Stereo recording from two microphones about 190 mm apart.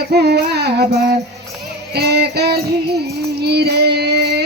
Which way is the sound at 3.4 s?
60° right (ahead or behind).